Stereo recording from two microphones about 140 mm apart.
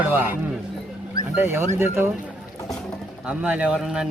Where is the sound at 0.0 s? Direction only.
15° right (ahead or behind).